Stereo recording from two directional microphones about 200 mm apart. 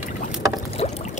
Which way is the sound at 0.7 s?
35° left (ahead or behind).